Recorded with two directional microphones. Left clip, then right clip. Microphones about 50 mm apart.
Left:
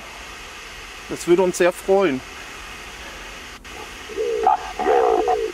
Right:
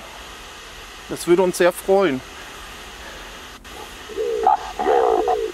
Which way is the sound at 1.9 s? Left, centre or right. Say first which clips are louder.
Left 1 dB; right.